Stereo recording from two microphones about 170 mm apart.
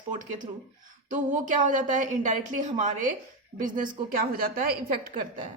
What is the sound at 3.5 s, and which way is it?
A woman's voice, 50° right (ahead or behind).